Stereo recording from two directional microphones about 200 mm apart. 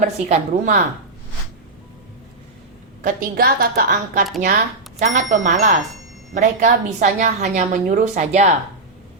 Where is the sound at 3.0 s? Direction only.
45° right (ahead or behind).